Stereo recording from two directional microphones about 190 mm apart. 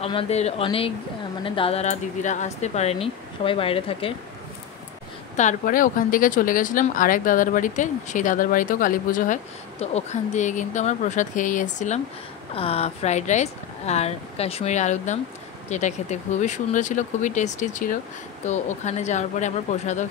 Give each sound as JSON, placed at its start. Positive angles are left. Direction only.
{"t": 0.0, "sound": "speech", "side_deg": 30}
{"t": 5.4, "sound": "speech", "side_deg": 45}